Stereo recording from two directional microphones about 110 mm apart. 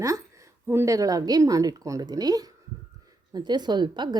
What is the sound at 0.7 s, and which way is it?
A woman's voice, 25° right (ahead or behind).